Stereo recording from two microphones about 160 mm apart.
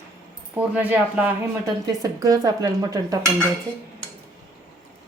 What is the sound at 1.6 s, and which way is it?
Speech, 25° right (ahead or behind).